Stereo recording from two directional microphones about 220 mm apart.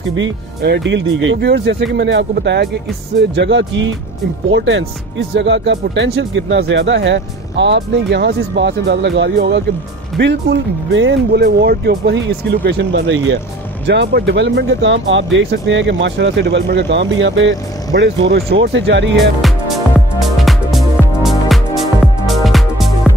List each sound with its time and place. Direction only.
0.1 s speech: 50° right (ahead or behind)
20.2 s music: centre (ahead or behind)